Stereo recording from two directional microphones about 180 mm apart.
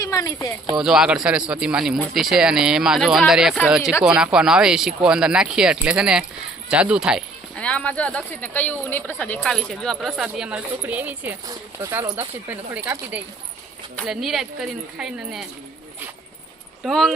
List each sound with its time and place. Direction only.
0.0 s speech: 20° left (ahead or behind)
0.8 s speech: 5° right (ahead or behind)
13.9 s speech: centre (ahead or behind)
16.8 s speech: centre (ahead or behind)